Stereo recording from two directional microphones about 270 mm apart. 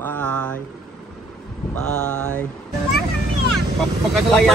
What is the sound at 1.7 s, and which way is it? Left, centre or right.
Speech, centre.